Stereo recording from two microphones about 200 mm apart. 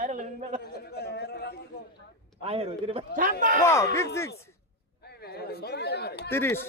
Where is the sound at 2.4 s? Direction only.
30° right (ahead or behind).